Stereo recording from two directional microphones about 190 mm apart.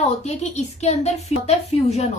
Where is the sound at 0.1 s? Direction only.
35° left (ahead or behind).